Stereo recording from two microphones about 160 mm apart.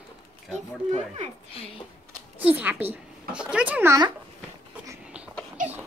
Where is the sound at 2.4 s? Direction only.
10° right (ahead or behind).